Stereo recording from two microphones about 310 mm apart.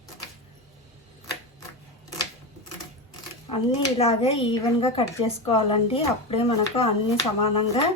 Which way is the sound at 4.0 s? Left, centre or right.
Centre.